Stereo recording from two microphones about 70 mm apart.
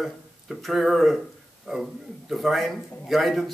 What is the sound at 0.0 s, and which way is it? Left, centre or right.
Speech, centre.